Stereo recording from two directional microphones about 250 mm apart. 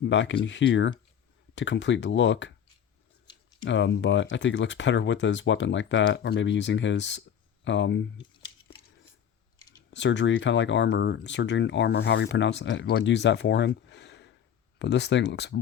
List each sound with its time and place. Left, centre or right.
0.0 s speech: left
3.6 s speech: left
9.9 s speech: left